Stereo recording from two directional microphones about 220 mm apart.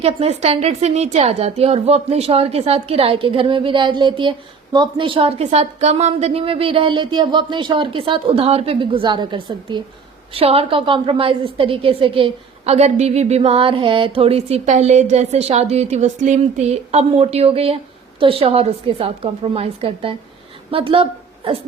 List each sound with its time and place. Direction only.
0.0 s a woman's voice: 30° right (ahead or behind)